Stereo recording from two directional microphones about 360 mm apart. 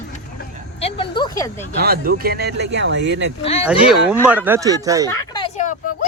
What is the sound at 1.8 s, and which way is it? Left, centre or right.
Speech, right.